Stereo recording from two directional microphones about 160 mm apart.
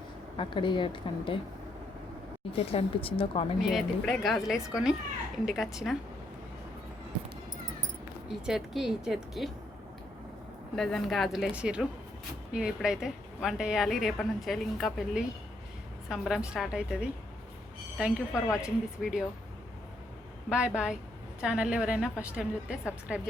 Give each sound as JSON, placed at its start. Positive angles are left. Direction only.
{"t": 0.3, "sound": "a woman's voice", "side_deg": 30}
{"t": 2.5, "sound": "a woman's voice", "side_deg": 35}
{"t": 3.6, "sound": "a woman's voice", "side_deg": 0}
{"t": 8.3, "sound": "a woman's voice", "side_deg": 0}
{"t": 10.8, "sound": "a woman's voice", "side_deg": 0}
{"t": 20.5, "sound": "a woman's voice", "side_deg": -5}